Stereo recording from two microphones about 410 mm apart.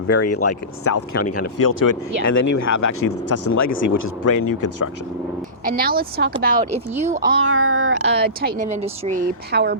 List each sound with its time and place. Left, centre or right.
0.1 s speech: left
1.5 s speech: left
2.8 s speech: left
5.6 s speech: right
7.4 s speech: right